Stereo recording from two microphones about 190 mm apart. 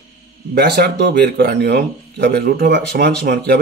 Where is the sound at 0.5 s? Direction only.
60° right (ahead or behind).